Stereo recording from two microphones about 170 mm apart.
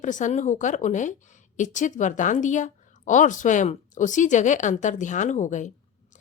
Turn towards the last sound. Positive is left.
turn(degrees=45)  # may be behind; listen again after turning